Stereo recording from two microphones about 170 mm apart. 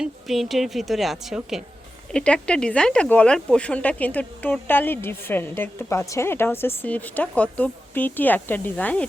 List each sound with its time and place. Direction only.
0.0 s a woman's voice: centre (ahead or behind)